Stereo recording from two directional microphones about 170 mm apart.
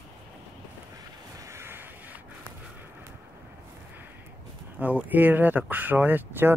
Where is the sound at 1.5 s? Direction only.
15° right (ahead or behind).